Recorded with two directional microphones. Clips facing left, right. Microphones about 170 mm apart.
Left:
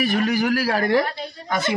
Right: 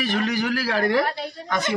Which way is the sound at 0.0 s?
10° left (ahead or behind).